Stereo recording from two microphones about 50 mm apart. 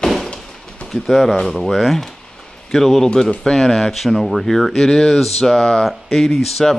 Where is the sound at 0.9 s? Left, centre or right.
Centre.